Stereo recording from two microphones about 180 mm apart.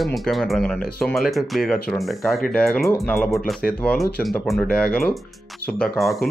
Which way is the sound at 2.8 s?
15° left (ahead or behind).